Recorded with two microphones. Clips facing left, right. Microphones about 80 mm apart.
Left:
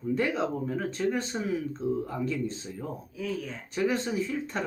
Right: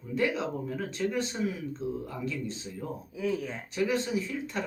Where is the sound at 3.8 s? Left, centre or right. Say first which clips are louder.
Left 1 dB; left.